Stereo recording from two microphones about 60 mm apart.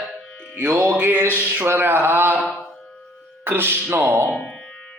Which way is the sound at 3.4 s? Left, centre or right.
Right.